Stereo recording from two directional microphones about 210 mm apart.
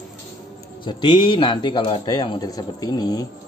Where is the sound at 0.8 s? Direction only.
20° left (ahead or behind).